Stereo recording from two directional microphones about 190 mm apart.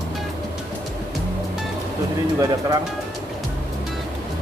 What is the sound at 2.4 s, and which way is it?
Speech, 20° right (ahead or behind).